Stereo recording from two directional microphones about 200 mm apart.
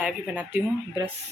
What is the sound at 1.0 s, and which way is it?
Speech, 20° right (ahead or behind).